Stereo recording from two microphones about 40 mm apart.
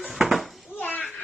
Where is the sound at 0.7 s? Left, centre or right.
Left.